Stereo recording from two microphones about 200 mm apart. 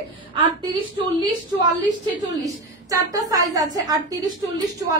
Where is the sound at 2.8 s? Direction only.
15° right (ahead or behind).